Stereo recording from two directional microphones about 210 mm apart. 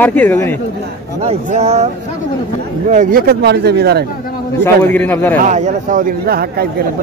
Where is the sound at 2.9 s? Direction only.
40° right (ahead or behind).